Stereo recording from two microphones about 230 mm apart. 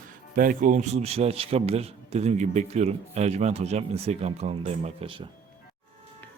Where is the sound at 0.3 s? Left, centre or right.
Right.